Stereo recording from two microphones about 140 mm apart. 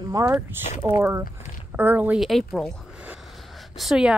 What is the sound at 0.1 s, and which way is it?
Speech, 20° right (ahead or behind).